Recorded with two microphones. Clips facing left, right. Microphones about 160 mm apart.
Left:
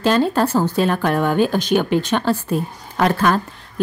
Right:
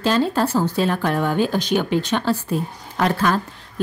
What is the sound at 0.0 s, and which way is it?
A woman's voice, 55° left (ahead or behind).